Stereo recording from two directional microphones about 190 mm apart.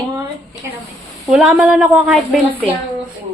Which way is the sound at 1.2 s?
5° right (ahead or behind).